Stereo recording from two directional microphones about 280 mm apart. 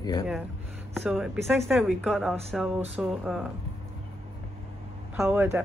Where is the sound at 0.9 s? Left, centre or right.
Centre.